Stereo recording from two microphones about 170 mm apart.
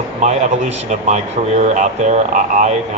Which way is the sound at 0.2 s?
45° right (ahead or behind).